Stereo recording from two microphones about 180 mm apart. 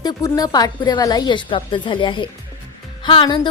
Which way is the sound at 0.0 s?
20° left (ahead or behind).